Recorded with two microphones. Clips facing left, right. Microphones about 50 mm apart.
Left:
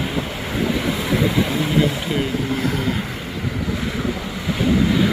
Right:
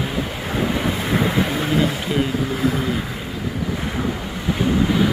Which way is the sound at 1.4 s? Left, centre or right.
Centre.